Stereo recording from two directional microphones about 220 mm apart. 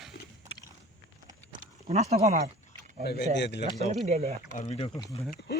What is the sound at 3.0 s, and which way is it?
Speech, 45° left (ahead or behind).